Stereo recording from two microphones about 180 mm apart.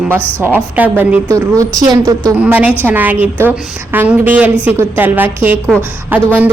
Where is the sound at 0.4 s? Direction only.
10° right (ahead or behind).